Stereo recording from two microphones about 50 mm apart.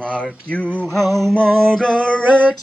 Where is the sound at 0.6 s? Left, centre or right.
Right.